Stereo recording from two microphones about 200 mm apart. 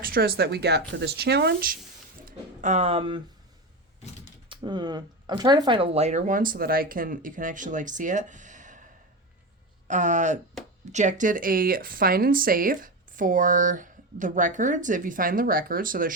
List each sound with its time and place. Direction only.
0.0 s speech: 50° right (ahead or behind)
2.2 s a sound: 35° right (ahead or behind)
4.4 s speech: 20° right (ahead or behind); by 16.1 s 45° right (ahead or behind)